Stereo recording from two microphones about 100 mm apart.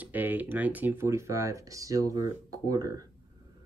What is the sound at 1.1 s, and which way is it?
Speech, 30° right (ahead or behind).